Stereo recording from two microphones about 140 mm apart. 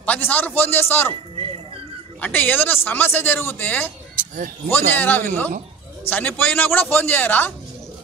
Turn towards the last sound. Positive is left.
turn(degrees=15)  # may be behind; listen again after turning